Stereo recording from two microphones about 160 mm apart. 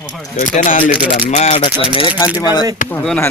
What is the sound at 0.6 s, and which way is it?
Speech, 55° left (ahead or behind).